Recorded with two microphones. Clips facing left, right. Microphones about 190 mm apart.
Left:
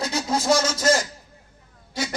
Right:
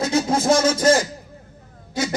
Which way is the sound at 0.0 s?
55° right (ahead or behind).